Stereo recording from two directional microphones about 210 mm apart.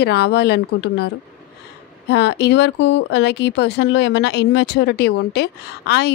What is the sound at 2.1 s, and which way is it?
Speech, 55° left (ahead or behind).